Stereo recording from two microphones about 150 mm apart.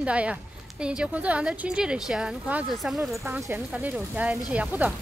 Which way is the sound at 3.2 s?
20° right (ahead or behind).